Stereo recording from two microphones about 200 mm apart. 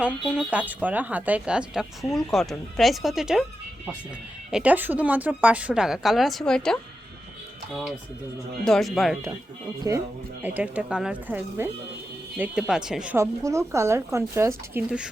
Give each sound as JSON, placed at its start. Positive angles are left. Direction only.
{"t": 0.0, "sound": "speech", "side_deg": -5}
{"t": 4.5, "sound": "speech", "side_deg": -5}
{"t": 9.9, "sound": "speech", "side_deg": -15}